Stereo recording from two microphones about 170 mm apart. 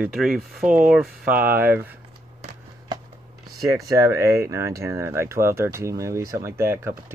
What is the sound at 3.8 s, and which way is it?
Speech, 20° right (ahead or behind).